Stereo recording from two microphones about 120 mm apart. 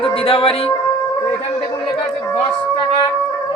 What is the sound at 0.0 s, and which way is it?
Speech, 50° left (ahead or behind).